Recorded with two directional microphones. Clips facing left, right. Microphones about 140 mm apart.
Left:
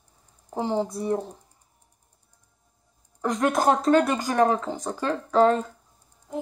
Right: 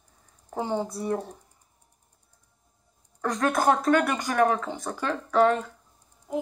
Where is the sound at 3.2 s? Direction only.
20° left (ahead or behind).